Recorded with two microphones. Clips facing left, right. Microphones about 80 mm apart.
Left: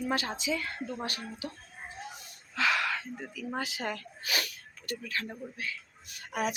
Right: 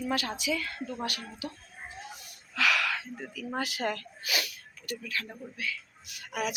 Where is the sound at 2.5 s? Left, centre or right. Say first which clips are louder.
Right 1 dB; left.